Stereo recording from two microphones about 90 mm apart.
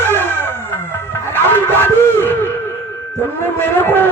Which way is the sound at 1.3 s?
20° left (ahead or behind).